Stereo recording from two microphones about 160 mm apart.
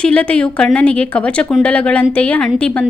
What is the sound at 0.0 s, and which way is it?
A woman's voice, 5° left (ahead or behind).